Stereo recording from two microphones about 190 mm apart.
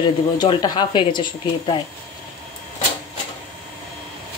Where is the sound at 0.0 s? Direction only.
25° left (ahead or behind).